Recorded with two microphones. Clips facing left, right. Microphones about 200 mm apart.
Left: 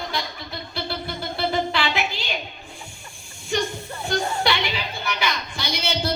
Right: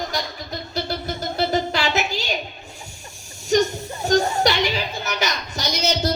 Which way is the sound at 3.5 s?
40° right (ahead or behind).